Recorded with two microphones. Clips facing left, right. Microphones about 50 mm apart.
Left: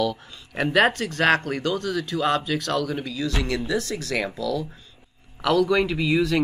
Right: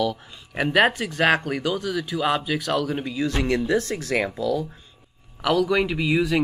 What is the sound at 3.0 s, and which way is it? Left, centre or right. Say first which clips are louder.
Speech: right 2 dB; right.